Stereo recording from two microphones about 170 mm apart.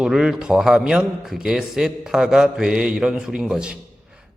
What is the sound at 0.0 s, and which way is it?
A man's voice, centre (ahead or behind).